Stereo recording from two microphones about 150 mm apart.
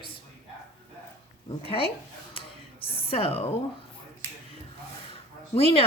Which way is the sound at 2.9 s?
40° left (ahead or behind).